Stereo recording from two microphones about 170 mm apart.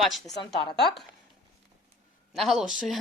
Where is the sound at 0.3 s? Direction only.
25° left (ahead or behind).